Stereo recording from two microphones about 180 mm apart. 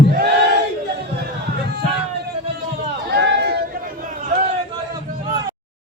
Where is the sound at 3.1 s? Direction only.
75° right (ahead or behind).